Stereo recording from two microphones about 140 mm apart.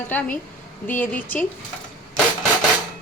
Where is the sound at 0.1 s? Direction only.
10° left (ahead or behind).